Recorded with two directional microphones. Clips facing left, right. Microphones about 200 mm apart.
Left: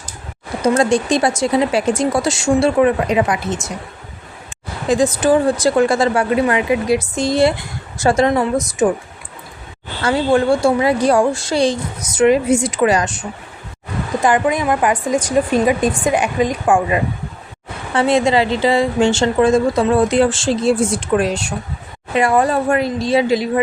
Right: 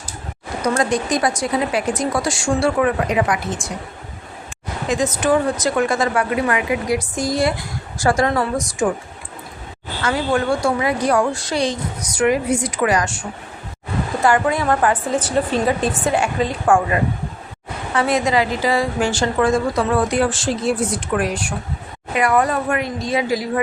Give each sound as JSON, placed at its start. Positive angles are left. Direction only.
{"t": 0.6, "sound": "a woman's voice", "side_deg": 30}
{"t": 4.9, "sound": "a woman's voice", "side_deg": 30}
{"t": 10.0, "sound": "a woman's voice", "side_deg": 30}
{"t": 17.9, "sound": "a woman's voice", "side_deg": 25}